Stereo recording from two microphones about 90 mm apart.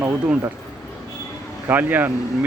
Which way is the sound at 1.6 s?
20° right (ahead or behind).